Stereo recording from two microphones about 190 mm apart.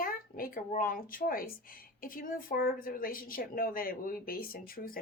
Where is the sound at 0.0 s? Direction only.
50° left (ahead or behind).